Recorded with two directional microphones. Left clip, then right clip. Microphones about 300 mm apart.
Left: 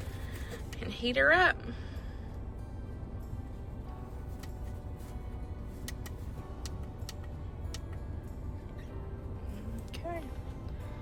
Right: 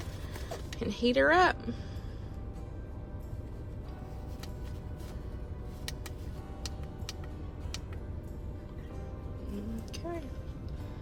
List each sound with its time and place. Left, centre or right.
0.8 s speech: centre
9.9 s music: centre